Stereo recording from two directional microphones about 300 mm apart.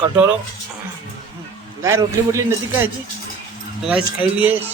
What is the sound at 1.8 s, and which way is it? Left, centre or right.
A man's voice, centre.